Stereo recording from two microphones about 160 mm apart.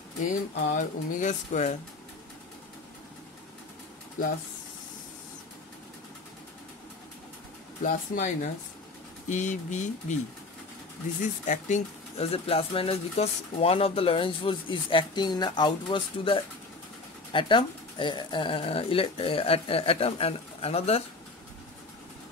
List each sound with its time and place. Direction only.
0.2 s speech: 50° left (ahead or behind)
7.8 s speech: 55° left (ahead or behind)
11.1 s speech: 50° left (ahead or behind)